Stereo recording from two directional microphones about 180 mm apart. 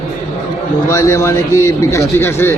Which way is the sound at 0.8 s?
15° left (ahead or behind).